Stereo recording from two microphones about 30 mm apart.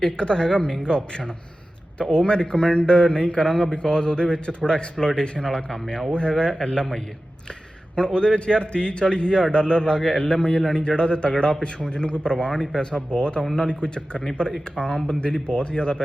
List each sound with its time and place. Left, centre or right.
0.0 s a woman's voice: left
2.0 s a man's voice: left
3.4 s a woman's voice: left
5.5 s a woman's voice: left
7.9 s a man's voice: left